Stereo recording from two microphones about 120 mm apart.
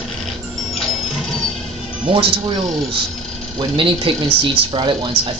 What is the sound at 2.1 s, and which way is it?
Speech, 45° right (ahead or behind).